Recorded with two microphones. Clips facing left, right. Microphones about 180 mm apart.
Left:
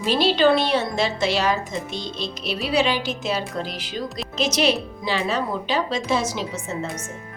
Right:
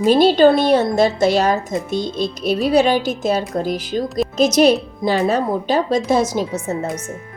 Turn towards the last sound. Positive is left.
turn(degrees=-40)  # may be behind; listen again after turning